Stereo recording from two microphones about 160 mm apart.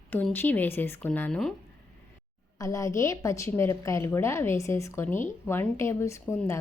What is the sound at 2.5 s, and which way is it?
Speech, 20° left (ahead or behind).